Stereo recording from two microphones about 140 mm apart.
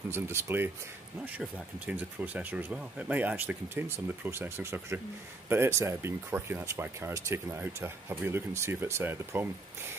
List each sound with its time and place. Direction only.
0.1 s speech: 20° right (ahead or behind)
1.9 s speech: 10° right (ahead or behind)